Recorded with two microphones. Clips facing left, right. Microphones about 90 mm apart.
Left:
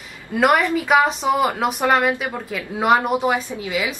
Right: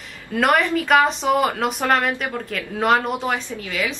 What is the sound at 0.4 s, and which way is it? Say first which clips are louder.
Speech: left 1 dB; 5° left (ahead or behind).